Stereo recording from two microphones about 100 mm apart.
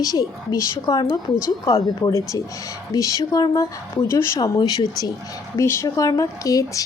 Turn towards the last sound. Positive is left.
turn(degrees=35)  # may be behind; listen again after turning